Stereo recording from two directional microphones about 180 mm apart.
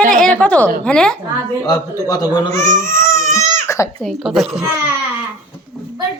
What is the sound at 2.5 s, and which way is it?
Speech, 45° right (ahead or behind).